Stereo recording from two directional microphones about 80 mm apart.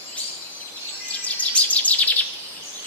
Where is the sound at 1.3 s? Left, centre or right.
Centre.